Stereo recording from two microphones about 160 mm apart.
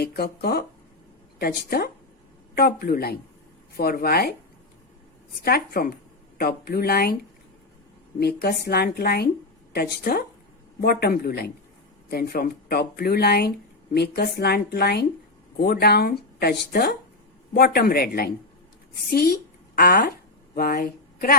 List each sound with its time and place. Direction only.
0.0 s speech: 80° left
5.5 s speech: 70° left (ahead or behind)
8.2 s speech: 75° left (ahead or behind)
13.9 s a woman's voice: 90° left; by 21.3 s 60° left (ahead or behind)